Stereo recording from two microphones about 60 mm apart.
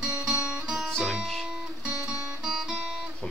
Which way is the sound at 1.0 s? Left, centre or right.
Centre.